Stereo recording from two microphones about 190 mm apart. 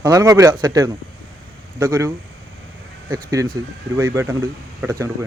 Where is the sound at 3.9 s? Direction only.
15° right (ahead or behind).